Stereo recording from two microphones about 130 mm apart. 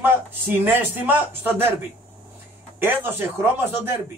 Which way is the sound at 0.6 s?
15° right (ahead or behind).